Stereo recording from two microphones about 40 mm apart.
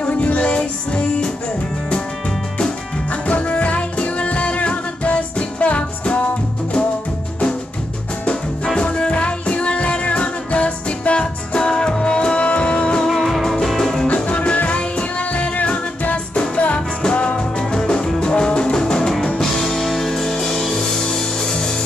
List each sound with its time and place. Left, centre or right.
0.0 s music: left
2.6 s music: left
8.6 s music: left
13.2 s music: centre
14.0 s music: left; by 19.1 s centre
19.7 s music: centre